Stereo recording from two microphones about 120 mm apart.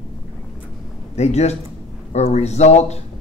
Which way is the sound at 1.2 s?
65° left (ahead or behind).